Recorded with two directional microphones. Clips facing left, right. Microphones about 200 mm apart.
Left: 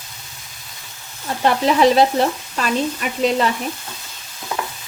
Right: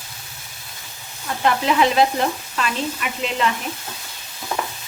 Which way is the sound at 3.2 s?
40° left (ahead or behind).